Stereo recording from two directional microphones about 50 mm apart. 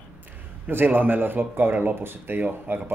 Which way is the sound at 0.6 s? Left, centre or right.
Right.